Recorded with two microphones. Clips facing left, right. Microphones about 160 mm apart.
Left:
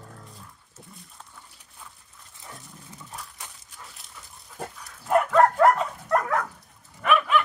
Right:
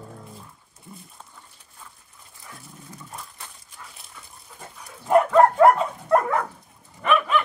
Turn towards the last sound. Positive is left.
turn(degrees=0)  # may be behind; listen again after turning